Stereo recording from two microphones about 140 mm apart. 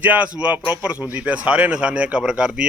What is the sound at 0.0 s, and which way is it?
Speech, 10° right (ahead or behind).